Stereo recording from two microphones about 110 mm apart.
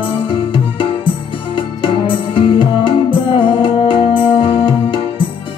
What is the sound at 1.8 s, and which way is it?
Music, 50° left (ahead or behind).